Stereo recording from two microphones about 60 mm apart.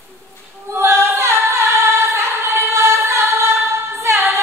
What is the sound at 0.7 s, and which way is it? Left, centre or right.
A capella, right.